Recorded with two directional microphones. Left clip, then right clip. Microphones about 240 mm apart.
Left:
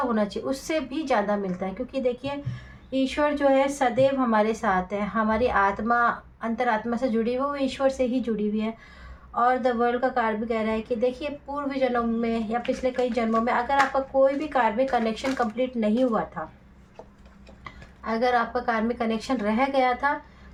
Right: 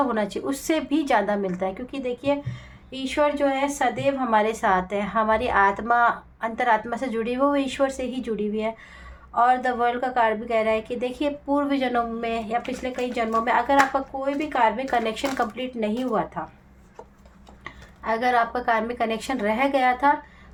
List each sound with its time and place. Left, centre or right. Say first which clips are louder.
0.1 s a woman's voice: right 1 dB; right
3.2 s a woman's voice: even; right
17.6 s a woman's voice: right 3 dB; right